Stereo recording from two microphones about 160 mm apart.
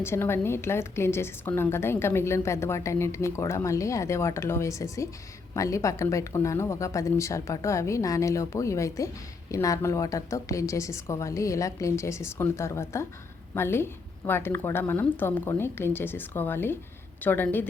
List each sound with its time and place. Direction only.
0.0 s a woman's voice: 15° left (ahead or behind)